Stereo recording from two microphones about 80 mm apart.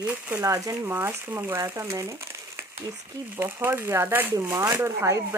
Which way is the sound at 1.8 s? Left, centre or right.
Right.